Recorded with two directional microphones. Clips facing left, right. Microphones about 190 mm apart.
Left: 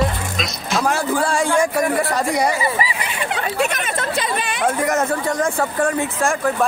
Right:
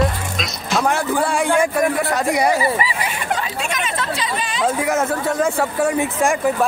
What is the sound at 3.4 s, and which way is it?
Chatter, 55° left (ahead or behind).